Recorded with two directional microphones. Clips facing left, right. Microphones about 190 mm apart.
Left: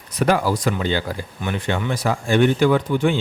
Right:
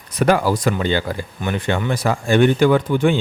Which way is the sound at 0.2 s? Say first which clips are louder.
Right 2 dB; 55° right (ahead or behind).